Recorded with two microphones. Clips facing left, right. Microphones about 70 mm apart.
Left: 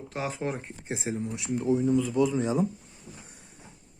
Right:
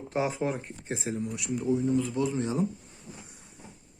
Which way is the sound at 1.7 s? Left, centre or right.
Left.